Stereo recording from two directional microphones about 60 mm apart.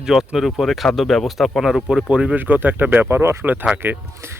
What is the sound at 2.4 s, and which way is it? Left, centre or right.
Speech, right.